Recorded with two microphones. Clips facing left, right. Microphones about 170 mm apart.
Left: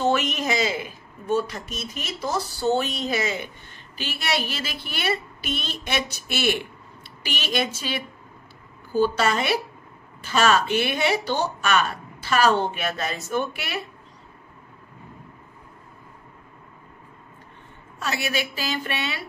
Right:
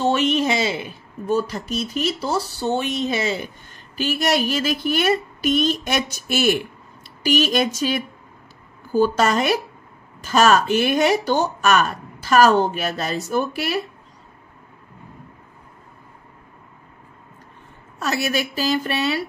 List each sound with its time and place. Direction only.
0.0 s a woman's voice: 30° right (ahead or behind)
2.7 s speech: 20° right (ahead or behind)
3.9 s speech: 45° right (ahead or behind)
18.0 s a woman's voice: 40° right (ahead or behind)